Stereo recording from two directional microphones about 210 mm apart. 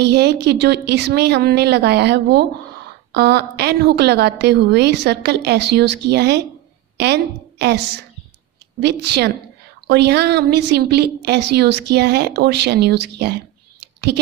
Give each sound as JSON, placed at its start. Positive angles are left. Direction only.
{"t": 0.0, "sound": "a woman's voice", "side_deg": -55}
{"t": 8.8, "sound": "a woman's voice", "side_deg": -55}